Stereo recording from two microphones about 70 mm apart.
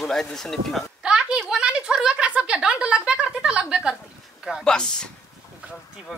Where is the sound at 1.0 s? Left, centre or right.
Centre.